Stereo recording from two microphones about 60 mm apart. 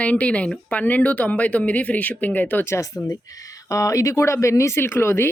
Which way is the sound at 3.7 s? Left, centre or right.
Left.